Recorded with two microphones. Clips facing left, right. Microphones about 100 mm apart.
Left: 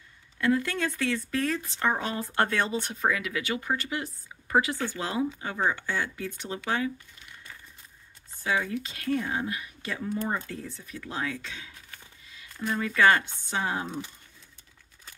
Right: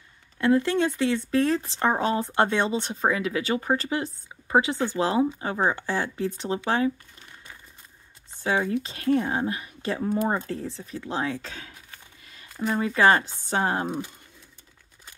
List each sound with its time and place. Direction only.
0.4 s speech: 25° right (ahead or behind)
12.8 s speech: 30° right (ahead or behind)
13.4 s speech: 45° right (ahead or behind)